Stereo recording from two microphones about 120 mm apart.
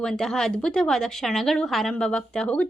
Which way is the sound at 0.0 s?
5° left (ahead or behind).